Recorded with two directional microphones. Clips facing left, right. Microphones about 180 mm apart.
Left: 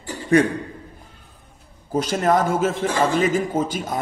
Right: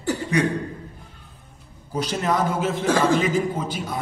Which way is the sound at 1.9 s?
45° left (ahead or behind).